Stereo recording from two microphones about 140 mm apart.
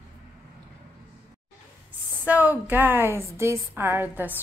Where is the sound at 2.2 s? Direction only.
10° right (ahead or behind).